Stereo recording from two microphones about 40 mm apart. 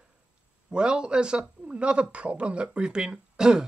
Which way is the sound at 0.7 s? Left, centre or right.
Right.